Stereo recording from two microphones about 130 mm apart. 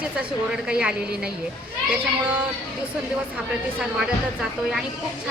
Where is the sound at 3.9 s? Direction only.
Centre (ahead or behind).